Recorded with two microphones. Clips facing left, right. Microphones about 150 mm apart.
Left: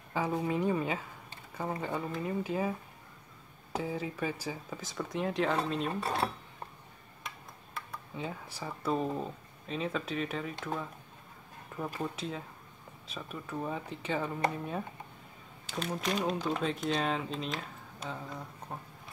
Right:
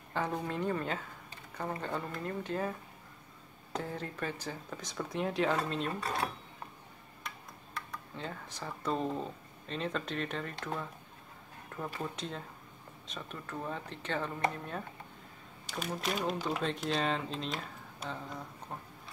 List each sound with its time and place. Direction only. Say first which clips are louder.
0.1 s speech: left 3 dB; 5° left (ahead or behind)
3.7 s speech: left 3 dB; 5° left (ahead or behind)
5.9 s speech: left 3 dB; 30° left (ahead or behind)
7.2 s speech: even; 5° left (ahead or behind)
15.8 s speech: left 2 dB; 5° right (ahead or behind)